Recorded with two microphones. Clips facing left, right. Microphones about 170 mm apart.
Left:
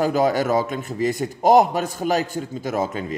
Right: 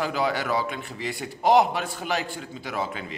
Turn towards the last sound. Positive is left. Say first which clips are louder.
# left 7 dB
turn(degrees=45)  # may be behind; listen again after turning